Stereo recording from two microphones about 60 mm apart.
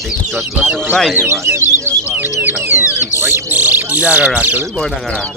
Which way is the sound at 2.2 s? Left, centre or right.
Right.